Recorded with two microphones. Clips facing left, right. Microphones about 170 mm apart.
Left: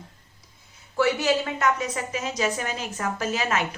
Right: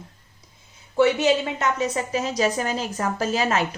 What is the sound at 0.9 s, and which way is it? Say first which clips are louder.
A woman's voice: right 4 dB; 20° right (ahead or behind).